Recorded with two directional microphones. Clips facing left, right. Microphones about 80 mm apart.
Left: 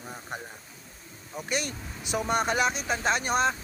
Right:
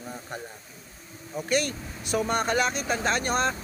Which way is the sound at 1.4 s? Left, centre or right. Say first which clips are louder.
Right 5 dB; centre.